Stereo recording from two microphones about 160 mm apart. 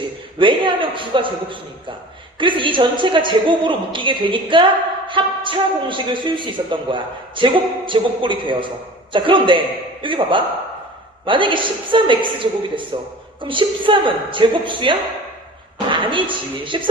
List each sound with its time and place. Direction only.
0.3 s a man's voice: 30° right (ahead or behind)
15.9 s a sound: 30° right (ahead or behind)
16.3 s a man's voice: 30° right (ahead or behind)